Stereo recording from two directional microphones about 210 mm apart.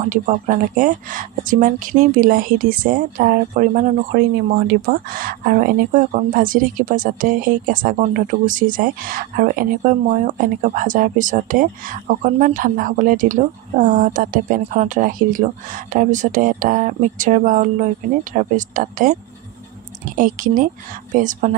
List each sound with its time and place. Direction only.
0.0 s speech: 35° right (ahead or behind)
20.2 s speech: 40° right (ahead or behind)